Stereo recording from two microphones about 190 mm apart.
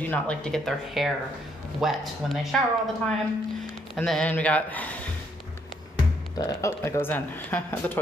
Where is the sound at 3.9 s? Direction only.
5° left (ahead or behind).